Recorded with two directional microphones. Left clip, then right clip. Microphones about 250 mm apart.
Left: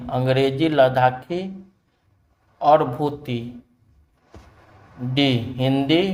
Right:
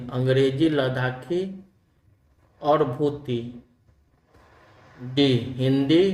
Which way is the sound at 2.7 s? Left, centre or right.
Centre.